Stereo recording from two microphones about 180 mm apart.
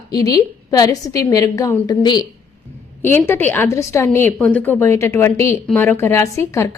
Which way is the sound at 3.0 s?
10° left (ahead or behind).